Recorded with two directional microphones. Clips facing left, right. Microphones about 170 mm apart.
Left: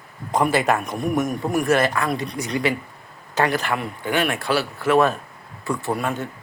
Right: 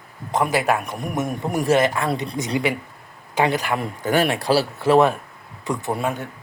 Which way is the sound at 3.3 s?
15° right (ahead or behind).